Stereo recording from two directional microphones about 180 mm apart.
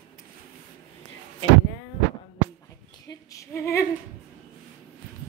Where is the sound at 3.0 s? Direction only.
15° left (ahead or behind).